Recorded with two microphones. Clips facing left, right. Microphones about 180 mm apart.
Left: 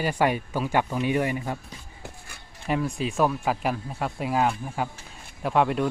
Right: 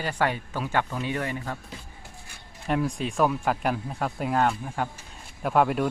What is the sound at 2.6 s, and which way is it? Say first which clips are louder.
Speech: even; centre (ahead or behind).